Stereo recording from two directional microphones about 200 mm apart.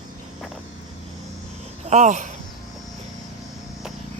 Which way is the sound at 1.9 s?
35° right (ahead or behind).